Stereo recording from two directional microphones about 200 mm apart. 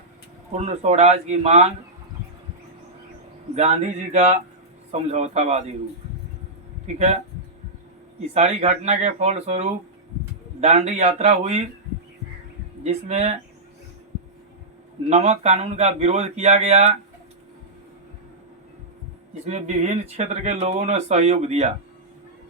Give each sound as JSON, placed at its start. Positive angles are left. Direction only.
{"t": 0.5, "sound": "speech", "side_deg": -35}
{"t": 3.5, "sound": "speech", "side_deg": -35}
{"t": 6.8, "sound": "speech", "side_deg": -35}
{"t": 8.3, "sound": "speech", "side_deg": -35}
{"t": 12.8, "sound": "speech", "side_deg": -35}
{"t": 15.1, "sound": "speech", "side_deg": -35}
{"t": 19.5, "sound": "speech", "side_deg": -35}